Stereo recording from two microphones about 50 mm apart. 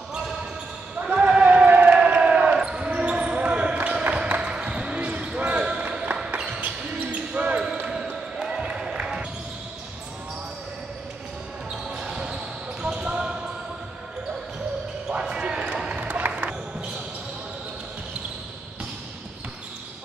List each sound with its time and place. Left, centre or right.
1.1 s basketball bounce: right
1.4 s a sound: right
2.0 s crowd: right
2.5 s basketball bounce: centre
7.9 s basketball bounce: centre
11.7 s basketball bounce: centre
15.0 s basketball bounce: centre
16.0 s basketball bounce: right